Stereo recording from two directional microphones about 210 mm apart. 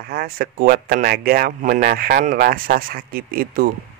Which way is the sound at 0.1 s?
45° right (ahead or behind).